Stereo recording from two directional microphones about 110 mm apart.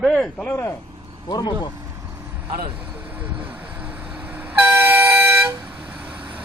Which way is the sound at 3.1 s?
15° right (ahead or behind).